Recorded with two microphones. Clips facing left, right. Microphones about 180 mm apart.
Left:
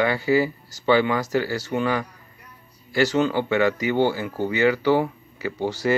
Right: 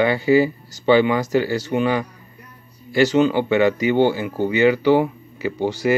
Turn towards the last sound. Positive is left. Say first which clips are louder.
# right 3 dB
turn(degrees=-15)  # may be behind; listen again after turning